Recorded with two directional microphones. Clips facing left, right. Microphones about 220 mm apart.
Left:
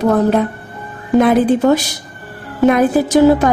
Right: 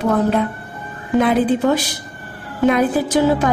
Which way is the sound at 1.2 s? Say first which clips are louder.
Left 4 dB; 45° left (ahead or behind).